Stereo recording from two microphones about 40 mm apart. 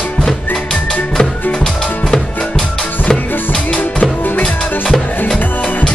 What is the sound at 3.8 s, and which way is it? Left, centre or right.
Music, left.